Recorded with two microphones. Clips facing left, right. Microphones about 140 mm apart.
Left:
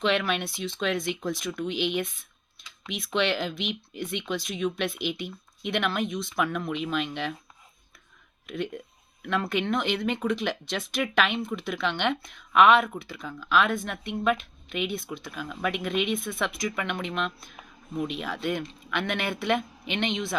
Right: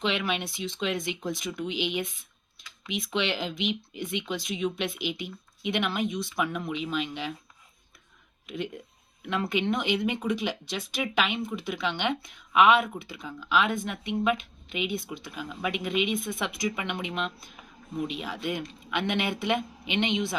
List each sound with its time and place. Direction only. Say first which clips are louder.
0.3 s speech: left 1 dB; 15° right (ahead or behind)
3.2 s speech: left 3 dB; 15° right (ahead or behind)
6.7 s speech: left 2 dB; 60° left (ahead or behind)
8.4 s speech: left 2 dB; 15° right (ahead or behind)